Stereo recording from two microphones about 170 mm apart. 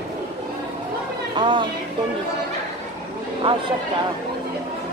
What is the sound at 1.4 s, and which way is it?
Speech, 30° right (ahead or behind).